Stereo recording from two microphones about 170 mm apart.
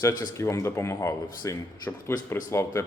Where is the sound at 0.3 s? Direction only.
15° left (ahead or behind).